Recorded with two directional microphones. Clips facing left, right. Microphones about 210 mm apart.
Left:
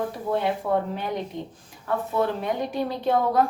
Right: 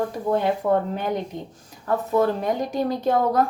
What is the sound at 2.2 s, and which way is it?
Speech, 40° right (ahead or behind).